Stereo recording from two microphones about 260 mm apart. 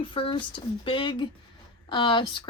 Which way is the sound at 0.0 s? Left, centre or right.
Centre.